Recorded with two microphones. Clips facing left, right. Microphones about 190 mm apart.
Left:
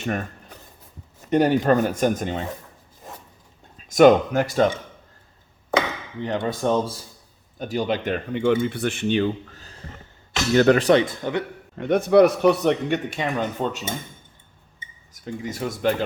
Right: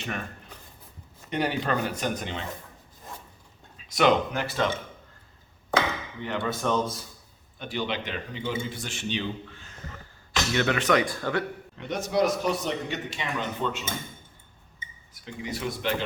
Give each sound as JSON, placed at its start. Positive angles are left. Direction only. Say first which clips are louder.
{"t": 0.0, "sound": "speech", "louder": "left 7 dB", "side_deg": 45}
{"t": 1.3, "sound": "speech", "louder": "left 9 dB", "side_deg": 45}
{"t": 3.8, "sound": "speech", "louder": "left 8 dB", "side_deg": 45}
{"t": 6.2, "sound": "speech", "louder": "left 5 dB", "side_deg": 35}
{"t": 7.6, "sound": "speech", "louder": "left 7 dB", "side_deg": 45}
{"t": 11.8, "sound": "a man's voice", "louder": "left 10 dB", "side_deg": 55}
{"t": 15.1, "sound": "speech", "louder": "left 4 dB", "side_deg": 45}